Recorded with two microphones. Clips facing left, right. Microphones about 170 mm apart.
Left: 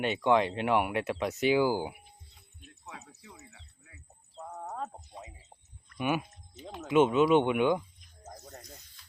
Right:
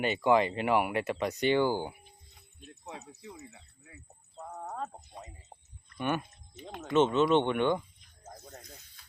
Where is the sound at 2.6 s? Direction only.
35° right (ahead or behind).